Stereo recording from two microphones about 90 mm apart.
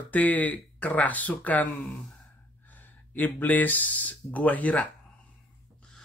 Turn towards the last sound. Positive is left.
turn(degrees=15)  # may be behind; listen again after turning